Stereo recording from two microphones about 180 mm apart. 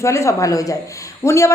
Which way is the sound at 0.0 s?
15° left (ahead or behind).